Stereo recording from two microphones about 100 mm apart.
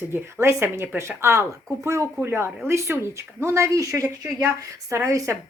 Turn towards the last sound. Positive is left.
turn(degrees=-30)  # may be behind; listen again after turning